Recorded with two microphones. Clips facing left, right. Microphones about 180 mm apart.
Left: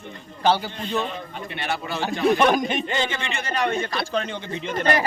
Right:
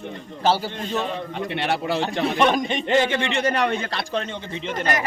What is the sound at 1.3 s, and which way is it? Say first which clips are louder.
Speech: right 5 dB; 70° right (ahead or behind).